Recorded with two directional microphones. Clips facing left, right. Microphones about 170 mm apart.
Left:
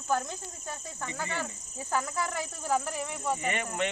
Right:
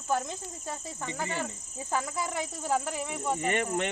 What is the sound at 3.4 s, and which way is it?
Speech, 45° right (ahead or behind).